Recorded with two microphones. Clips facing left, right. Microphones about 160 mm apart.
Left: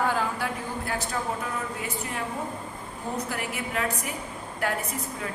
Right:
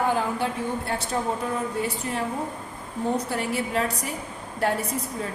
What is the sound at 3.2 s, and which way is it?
Speech, 30° right (ahead or behind).